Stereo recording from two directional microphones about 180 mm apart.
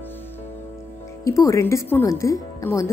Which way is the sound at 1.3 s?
15° left (ahead or behind).